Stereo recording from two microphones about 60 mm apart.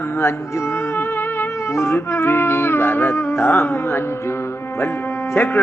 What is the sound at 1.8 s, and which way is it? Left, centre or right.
Music, left.